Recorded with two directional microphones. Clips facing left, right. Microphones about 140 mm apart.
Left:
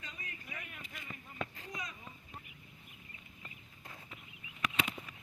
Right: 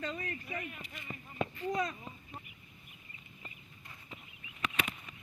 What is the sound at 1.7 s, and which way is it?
Speech, 55° right (ahead or behind).